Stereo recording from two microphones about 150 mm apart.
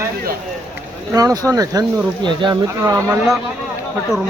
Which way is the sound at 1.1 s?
25° right (ahead or behind).